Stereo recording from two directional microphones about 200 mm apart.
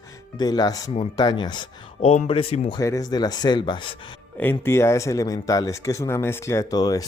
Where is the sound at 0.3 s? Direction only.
20° left (ahead or behind).